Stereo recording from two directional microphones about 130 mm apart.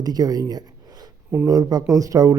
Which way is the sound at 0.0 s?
30° right (ahead or behind).